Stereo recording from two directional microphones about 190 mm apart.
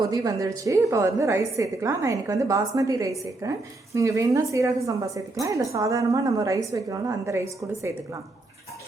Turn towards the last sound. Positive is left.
turn(degrees=-15)  # may be behind; listen again after turning